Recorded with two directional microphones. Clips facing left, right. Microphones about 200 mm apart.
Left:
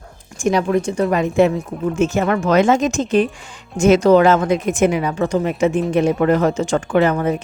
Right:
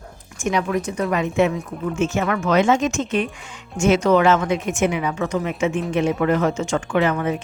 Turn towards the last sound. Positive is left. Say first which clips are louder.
# left 4 dB
turn(degrees=40)  # may be behind; listen again after turning